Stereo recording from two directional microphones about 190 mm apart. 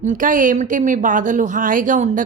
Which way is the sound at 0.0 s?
45° right (ahead or behind).